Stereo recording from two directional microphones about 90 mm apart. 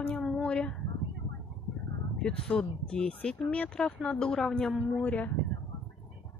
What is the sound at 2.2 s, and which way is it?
Speech, 10° left (ahead or behind).